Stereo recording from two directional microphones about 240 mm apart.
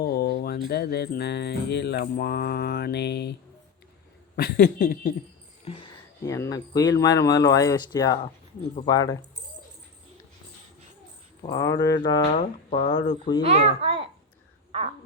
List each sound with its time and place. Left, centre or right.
0.0 s a sound: left
0.7 s mantra: left
4.4 s mantra: left
5.6 s speech: left
11.4 s speech: centre
13.5 s a child's voice: right